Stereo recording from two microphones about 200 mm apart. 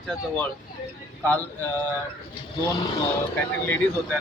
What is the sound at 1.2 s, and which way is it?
Speech, 10° left (ahead or behind).